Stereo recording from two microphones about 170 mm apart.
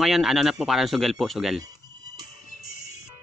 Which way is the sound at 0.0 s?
Centre (ahead or behind).